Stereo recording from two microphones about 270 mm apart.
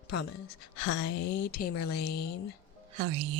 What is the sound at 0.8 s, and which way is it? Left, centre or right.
Speech, left.